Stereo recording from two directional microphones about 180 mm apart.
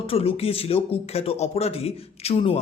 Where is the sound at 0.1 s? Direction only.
30° left (ahead or behind).